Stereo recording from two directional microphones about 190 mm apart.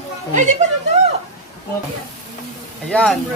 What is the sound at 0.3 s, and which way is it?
Speech, 40° right (ahead or behind).